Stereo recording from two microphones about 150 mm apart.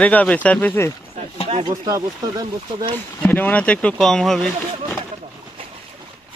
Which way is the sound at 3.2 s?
10° left (ahead or behind).